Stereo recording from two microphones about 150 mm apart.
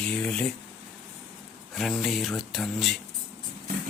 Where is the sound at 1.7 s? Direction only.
Centre (ahead or behind).